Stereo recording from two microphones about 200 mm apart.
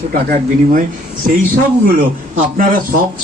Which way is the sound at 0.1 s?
45° right (ahead or behind).